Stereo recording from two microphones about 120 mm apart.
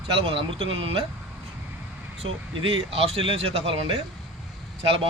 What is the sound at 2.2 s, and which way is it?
Speech, 55° right (ahead or behind).